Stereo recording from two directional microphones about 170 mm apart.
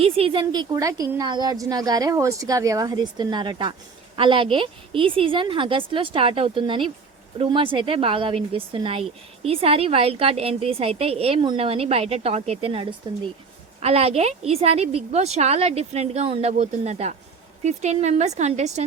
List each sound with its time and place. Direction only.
0.0 s a woman's voice: 35° right (ahead or behind)